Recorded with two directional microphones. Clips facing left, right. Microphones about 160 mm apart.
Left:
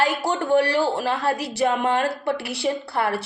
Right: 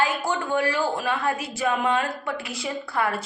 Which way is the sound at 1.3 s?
75° left (ahead or behind).